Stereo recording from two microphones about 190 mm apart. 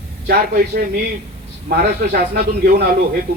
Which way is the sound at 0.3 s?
50° right (ahead or behind).